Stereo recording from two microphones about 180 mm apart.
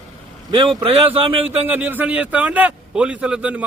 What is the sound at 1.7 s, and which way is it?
A man's voice, 10° right (ahead or behind).